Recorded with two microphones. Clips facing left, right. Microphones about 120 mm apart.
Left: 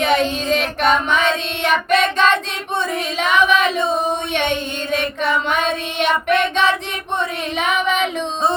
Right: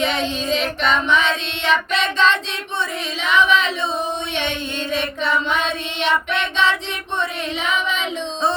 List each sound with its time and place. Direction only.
0.0 s child singing: 50° left (ahead or behind)
3.2 s a sound: 50° left (ahead or behind)
4.4 s child singing: 50° left (ahead or behind)